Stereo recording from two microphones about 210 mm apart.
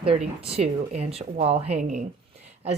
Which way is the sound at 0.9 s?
30° right (ahead or behind).